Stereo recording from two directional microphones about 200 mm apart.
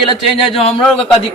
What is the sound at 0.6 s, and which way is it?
Speech, 30° left (ahead or behind).